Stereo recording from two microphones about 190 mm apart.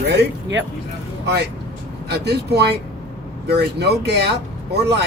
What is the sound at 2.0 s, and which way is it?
Speech, 60° right (ahead or behind).